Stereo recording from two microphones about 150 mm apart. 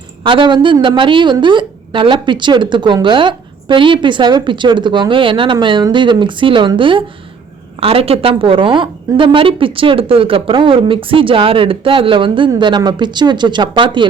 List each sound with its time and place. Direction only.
0.2 s a woman's voice: 35° right (ahead or behind)